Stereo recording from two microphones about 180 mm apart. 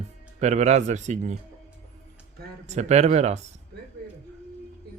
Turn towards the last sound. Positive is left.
turn(degrees=-40)  # may be behind; listen again after turning